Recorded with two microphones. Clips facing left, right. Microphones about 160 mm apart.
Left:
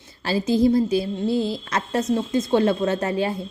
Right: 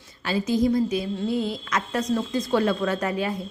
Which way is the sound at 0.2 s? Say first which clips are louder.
Left 3 dB; 35° left (ahead or behind).